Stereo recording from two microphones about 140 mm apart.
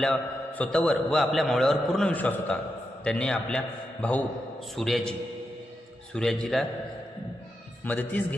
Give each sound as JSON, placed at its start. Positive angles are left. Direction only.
{"t": 0.0, "sound": "a man's voice", "side_deg": 10}
{"t": 4.7, "sound": "a man's voice", "side_deg": 0}
{"t": 6.1, "sound": "a man's voice", "side_deg": 5}
{"t": 7.9, "sound": "a man's voice", "side_deg": 10}